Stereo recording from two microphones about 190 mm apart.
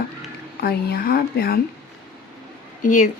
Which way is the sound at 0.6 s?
55° left (ahead or behind).